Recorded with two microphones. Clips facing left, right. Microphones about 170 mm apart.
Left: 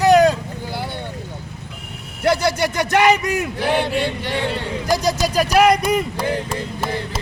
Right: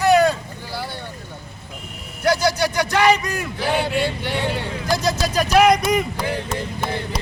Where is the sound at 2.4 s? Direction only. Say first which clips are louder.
Even; 20° left (ahead or behind).